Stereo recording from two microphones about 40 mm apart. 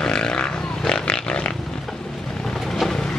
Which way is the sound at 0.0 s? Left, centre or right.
Left.